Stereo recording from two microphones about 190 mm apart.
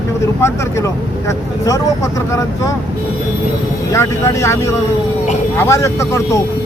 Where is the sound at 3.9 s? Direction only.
15° left (ahead or behind).